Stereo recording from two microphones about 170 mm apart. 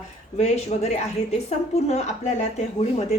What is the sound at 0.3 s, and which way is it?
A woman's voice, 40° left (ahead or behind).